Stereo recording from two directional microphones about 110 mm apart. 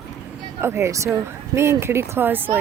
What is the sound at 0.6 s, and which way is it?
Speech, 25° right (ahead or behind).